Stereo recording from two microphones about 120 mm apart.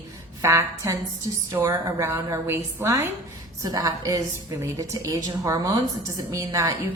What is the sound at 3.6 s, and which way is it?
A woman's voice, 35° right (ahead or behind).